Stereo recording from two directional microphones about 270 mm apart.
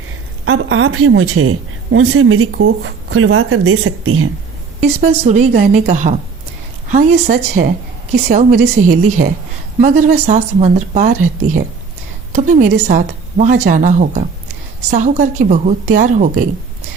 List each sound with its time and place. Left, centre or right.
0.4 s a woman's voice: right
4.8 s a woman's voice: right
12.3 s a woman's voice: right